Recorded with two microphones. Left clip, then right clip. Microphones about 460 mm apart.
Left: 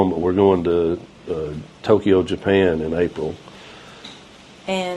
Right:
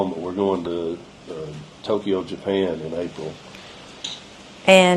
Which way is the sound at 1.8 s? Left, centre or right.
Left.